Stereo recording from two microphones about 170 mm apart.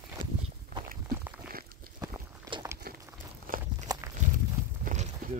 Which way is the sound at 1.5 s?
60° right (ahead or behind).